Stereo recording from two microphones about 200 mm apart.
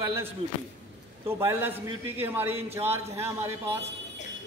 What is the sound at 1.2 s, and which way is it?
A man's voice, 10° right (ahead or behind).